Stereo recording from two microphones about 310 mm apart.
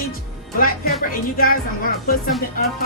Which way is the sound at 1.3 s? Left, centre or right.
Left.